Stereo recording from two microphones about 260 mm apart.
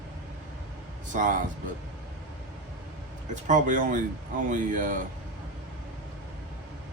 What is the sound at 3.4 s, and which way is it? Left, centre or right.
Speech, right.